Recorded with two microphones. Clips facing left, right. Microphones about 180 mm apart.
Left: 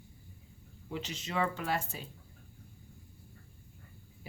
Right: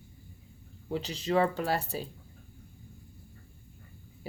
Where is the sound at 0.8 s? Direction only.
35° right (ahead or behind).